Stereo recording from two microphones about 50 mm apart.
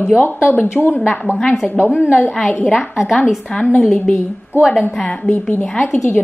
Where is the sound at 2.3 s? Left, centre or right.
Centre.